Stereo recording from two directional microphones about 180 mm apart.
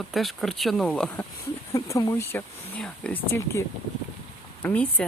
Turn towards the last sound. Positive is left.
turn(degrees=10)  # may be behind; listen again after turning